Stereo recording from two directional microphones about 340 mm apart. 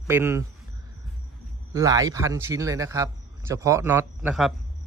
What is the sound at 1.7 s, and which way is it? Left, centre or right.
A man's voice, centre.